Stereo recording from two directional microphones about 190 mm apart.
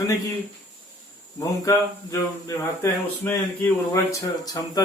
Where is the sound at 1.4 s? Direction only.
15° left (ahead or behind).